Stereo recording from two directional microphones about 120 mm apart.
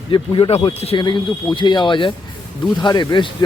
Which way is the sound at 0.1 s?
45° left (ahead or behind).